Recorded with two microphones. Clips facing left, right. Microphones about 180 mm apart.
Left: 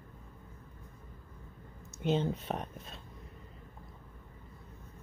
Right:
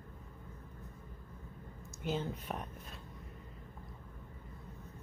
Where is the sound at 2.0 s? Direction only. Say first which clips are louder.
Left 6 dB; 25° left (ahead or behind).